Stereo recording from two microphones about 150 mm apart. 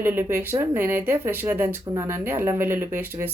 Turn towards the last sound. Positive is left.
turn(degrees=-15)  # may be behind; listen again after turning